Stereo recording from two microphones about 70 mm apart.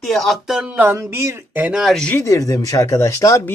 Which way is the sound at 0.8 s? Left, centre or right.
Right.